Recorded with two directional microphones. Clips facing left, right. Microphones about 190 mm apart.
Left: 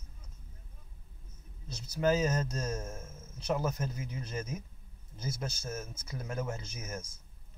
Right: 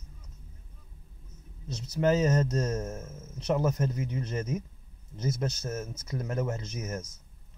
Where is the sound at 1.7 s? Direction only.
20° right (ahead or behind).